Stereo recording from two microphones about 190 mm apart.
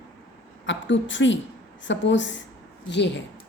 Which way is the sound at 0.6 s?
75° left (ahead or behind).